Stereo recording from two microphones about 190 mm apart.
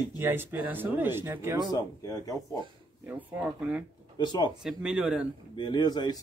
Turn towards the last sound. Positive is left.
turn(degrees=20)  # may be behind; listen again after turning